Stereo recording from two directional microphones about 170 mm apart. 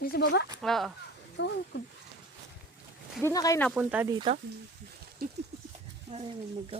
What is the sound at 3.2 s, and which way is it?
Speech, 15° left (ahead or behind).